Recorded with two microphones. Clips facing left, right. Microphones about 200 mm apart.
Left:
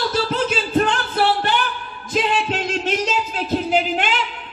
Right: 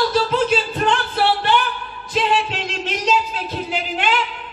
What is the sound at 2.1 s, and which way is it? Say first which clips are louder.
Speech: even; 45° left (ahead or behind).